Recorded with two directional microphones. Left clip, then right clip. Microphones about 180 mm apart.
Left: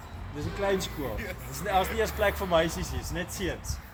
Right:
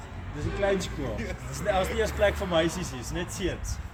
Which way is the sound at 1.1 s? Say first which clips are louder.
Right 1 dB; 15° right (ahead or behind).